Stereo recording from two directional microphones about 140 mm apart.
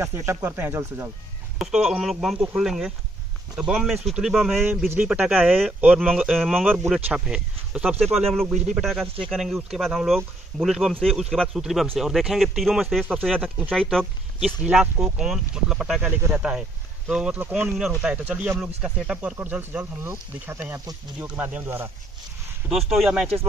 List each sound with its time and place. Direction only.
0.0 s speech: 20° right (ahead or behind)
1.6 s speech: centre (ahead or behind)
22.7 s speech: centre (ahead or behind)